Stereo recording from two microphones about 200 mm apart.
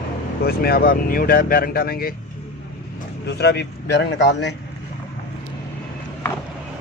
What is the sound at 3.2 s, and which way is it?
A man's voice, 60° left (ahead or behind).